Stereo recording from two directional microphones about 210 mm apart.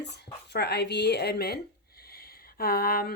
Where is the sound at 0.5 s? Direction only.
50° left (ahead or behind).